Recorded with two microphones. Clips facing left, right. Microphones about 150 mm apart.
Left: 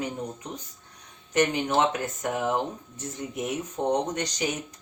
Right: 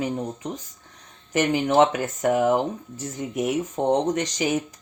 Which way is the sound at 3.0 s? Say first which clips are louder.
Right 5 dB; 90° right.